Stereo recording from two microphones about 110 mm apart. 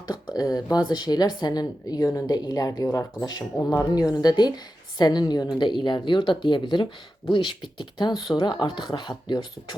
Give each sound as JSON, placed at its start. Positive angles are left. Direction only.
{"t": 0.1, "sound": "speech", "side_deg": 35}